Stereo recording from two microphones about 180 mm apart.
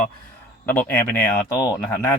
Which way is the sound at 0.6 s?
10° left (ahead or behind).